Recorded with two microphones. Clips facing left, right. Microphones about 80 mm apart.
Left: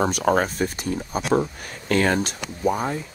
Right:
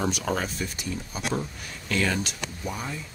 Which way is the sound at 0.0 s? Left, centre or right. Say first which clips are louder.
Left 7 dB; left.